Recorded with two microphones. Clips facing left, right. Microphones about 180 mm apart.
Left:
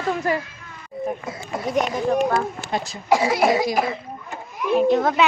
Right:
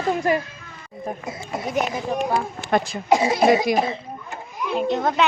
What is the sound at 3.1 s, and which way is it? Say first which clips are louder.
Speech: right 1 dB; 20° right (ahead or behind).